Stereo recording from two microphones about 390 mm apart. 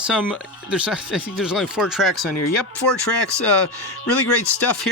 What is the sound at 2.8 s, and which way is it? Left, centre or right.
Speech, left.